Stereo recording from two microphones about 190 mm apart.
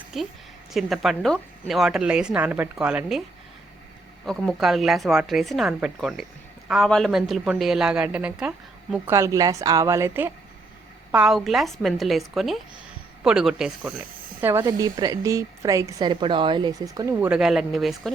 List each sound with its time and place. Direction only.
0.1 s a woman's voice: centre (ahead or behind)
4.4 s a woman's voice: centre (ahead or behind)
11.1 s a woman's voice: 5° right (ahead or behind)